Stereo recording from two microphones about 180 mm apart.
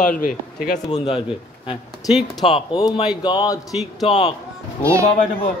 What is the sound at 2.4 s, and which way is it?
Speech, 30° left (ahead or behind).